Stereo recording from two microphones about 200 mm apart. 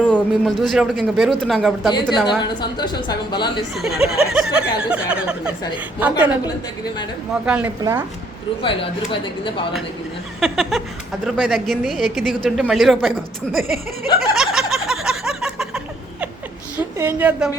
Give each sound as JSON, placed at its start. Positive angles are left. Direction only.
{"t": 0.0, "sound": "a woman's voice", "side_deg": 5}
{"t": 2.4, "sound": "a woman's voice", "side_deg": 20}
{"t": 3.8, "sound": "a woman's voice", "side_deg": 0}
{"t": 7.4, "sound": "a woman's voice", "side_deg": -5}
{"t": 8.6, "sound": "a woman's voice", "side_deg": 25}
{"t": 10.4, "sound": "a woman's voice", "side_deg": 0}
{"t": 14.2, "sound": "a sound", "side_deg": 0}
{"t": 17.0, "sound": "a woman's voice", "side_deg": -10}